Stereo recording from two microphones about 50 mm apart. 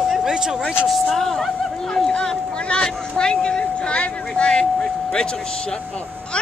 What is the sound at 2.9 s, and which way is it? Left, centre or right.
Speech, centre.